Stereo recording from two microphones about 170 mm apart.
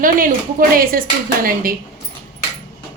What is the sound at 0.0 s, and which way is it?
A woman's voice, 55° right (ahead or behind).